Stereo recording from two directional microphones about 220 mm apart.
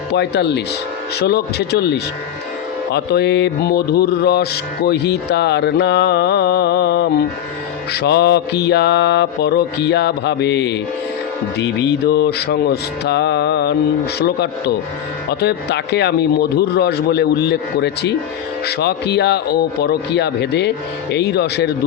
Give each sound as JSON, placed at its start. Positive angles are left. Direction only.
{"t": 0.1, "sound": "mantra", "side_deg": 50}
{"t": 15.3, "sound": "mantra", "side_deg": 50}